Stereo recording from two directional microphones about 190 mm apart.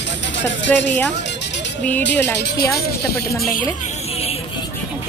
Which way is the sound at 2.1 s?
10° left (ahead or behind).